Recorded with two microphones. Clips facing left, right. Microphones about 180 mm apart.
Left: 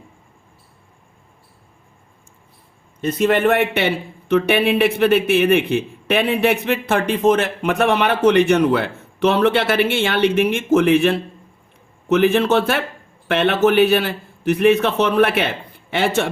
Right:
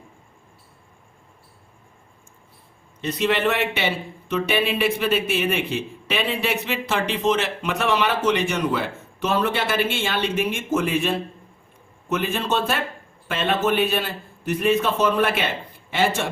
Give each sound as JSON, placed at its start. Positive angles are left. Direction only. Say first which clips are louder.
{"t": 3.0, "sound": "a man's voice", "louder": "left 5 dB", "side_deg": 50}